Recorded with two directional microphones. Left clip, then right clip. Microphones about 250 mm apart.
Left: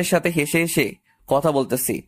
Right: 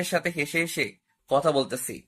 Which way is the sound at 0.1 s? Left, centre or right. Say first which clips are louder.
Left 7 dB; left.